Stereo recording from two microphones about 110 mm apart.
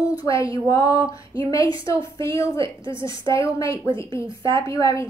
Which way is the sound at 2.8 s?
45° right (ahead or behind).